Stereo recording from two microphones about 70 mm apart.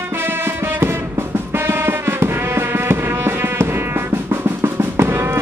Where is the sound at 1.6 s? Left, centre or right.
Right.